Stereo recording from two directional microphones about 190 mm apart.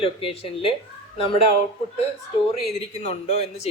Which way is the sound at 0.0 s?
30° left (ahead or behind).